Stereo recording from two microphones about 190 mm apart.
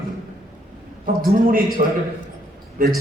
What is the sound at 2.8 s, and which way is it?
Speech, 50° right (ahead or behind).